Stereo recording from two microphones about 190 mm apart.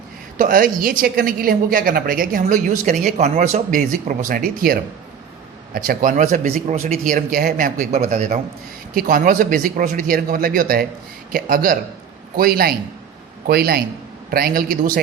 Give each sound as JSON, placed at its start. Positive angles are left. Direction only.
{"t": 0.3, "sound": "a woman's voice", "side_deg": -45}